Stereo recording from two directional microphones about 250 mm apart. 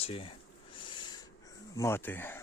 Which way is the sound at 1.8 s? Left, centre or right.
Centre.